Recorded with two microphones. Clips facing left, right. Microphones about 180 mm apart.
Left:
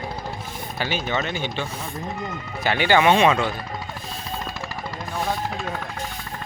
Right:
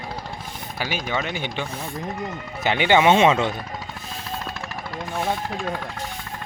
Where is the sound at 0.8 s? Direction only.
10° right (ahead or behind).